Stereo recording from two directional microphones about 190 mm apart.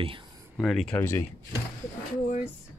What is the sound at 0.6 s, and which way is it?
Speech, 5° left (ahead or behind).